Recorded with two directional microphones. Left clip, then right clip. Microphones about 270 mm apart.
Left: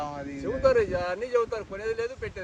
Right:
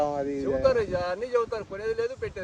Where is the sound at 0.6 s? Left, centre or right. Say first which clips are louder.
Left 3 dB; centre.